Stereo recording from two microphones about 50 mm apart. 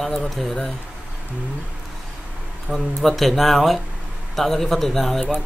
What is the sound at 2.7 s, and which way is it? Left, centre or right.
Speech, centre.